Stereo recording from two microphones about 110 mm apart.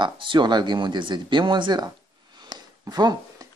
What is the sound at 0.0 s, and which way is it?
Speech, 45° right (ahead or behind).